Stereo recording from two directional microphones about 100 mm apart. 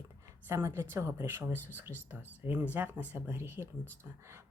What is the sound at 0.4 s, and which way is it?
Speech, 25° right (ahead or behind).